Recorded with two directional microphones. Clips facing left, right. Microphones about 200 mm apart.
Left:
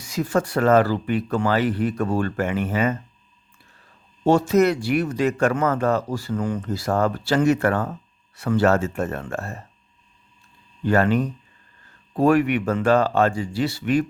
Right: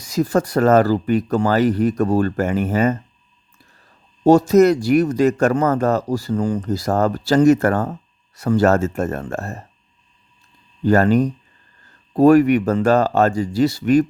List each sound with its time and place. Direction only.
0.0 s speech: 40° right (ahead or behind)
4.2 s speech: 40° right (ahead or behind)
10.8 s speech: 40° right (ahead or behind)